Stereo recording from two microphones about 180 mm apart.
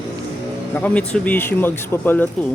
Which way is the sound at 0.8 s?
5° left (ahead or behind).